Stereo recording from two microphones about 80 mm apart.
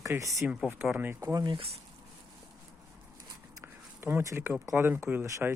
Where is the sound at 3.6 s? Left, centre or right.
Right.